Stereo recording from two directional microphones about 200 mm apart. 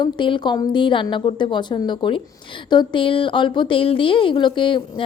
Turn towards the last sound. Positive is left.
turn(degrees=25)  # may be behind; listen again after turning